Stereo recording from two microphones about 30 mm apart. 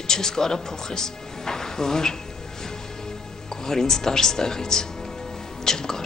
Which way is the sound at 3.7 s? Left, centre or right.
Centre.